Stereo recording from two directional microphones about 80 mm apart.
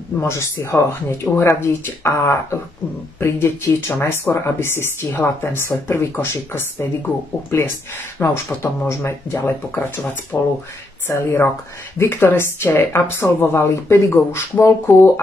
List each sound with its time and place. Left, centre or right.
0.2 s a woman's voice: left
8.2 s a woman's voice: left